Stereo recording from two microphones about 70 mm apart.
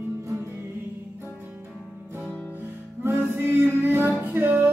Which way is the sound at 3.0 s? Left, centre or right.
Right.